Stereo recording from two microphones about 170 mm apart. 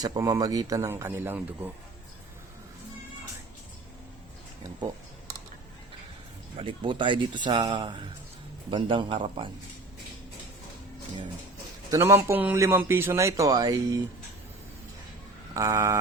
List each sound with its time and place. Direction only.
0.0 s speech: 20° right (ahead or behind)
6.6 s speech: 30° right (ahead or behind)
11.9 s speech: 15° right (ahead or behind)
15.5 s speech: 20° right (ahead or behind)